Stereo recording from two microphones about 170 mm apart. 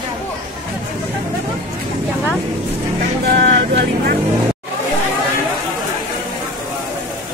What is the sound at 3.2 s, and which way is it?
Speech, 65° right (ahead or behind).